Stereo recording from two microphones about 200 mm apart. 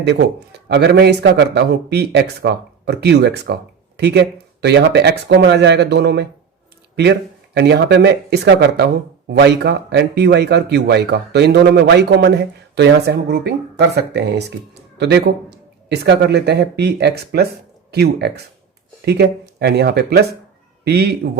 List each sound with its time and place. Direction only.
0.0 s a man's voice: 60° right (ahead or behind)